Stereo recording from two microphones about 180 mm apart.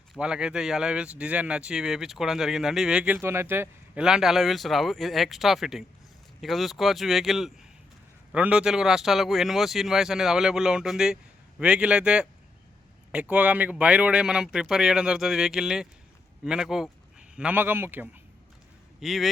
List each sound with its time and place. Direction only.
0.2 s speech: 5° right (ahead or behind)
18.9 s speech: centre (ahead or behind)